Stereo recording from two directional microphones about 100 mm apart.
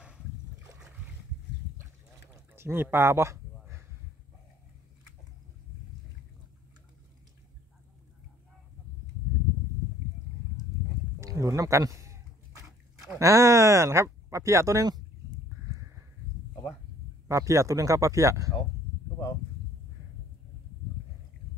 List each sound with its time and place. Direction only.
2.5 s speech: 25° right (ahead or behind)
11.1 s a sound: 30° right (ahead or behind)
13.1 s speech: 30° right (ahead or behind)
17.3 s speech: 30° right (ahead or behind)